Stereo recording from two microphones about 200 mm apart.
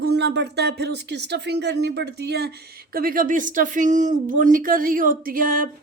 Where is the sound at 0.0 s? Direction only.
55° right (ahead or behind).